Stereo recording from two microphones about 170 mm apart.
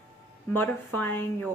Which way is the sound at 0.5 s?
10° left (ahead or behind).